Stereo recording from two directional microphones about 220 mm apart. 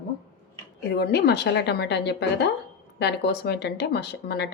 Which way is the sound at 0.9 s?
45° left (ahead or behind).